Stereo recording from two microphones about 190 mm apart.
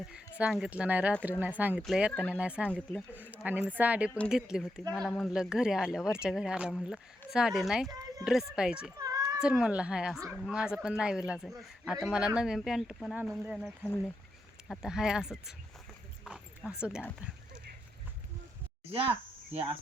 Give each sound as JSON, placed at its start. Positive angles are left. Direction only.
{"t": 0.1, "sound": "speech", "side_deg": -5}
{"t": 7.9, "sound": "a sound", "side_deg": -20}
{"t": 8.2, "sound": "speech", "side_deg": 0}
{"t": 9.0, "sound": "children playing", "side_deg": -20}
{"t": 9.4, "sound": "speech", "side_deg": -5}